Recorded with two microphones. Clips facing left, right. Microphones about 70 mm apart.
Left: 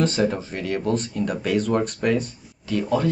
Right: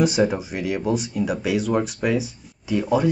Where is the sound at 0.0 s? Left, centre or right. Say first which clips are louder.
Right 2 dB; centre.